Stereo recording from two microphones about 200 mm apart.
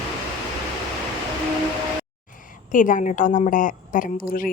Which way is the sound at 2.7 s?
40° left (ahead or behind).